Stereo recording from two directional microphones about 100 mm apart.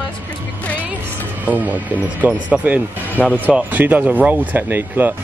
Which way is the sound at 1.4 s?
15° right (ahead or behind).